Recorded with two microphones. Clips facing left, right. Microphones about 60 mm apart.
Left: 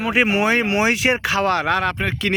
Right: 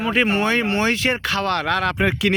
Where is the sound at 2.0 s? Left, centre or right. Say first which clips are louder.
Right 3 dB; centre.